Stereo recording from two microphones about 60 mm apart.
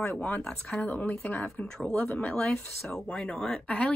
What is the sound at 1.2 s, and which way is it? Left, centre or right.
Speech, left.